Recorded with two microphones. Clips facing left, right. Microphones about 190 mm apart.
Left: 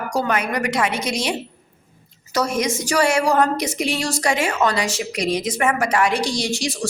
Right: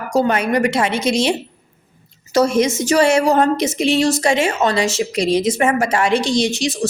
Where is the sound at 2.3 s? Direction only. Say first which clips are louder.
Right 6 dB; 25° right (ahead or behind).